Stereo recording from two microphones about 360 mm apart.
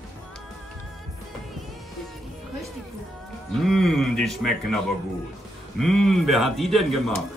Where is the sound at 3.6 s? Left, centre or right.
Centre.